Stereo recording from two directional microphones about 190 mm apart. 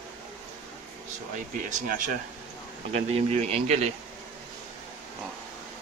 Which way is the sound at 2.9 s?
35° right (ahead or behind).